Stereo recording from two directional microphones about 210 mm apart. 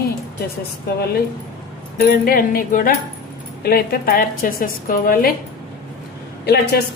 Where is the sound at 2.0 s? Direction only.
45° left (ahead or behind).